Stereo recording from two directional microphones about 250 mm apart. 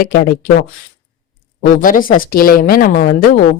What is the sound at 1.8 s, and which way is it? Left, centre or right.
Speech, left.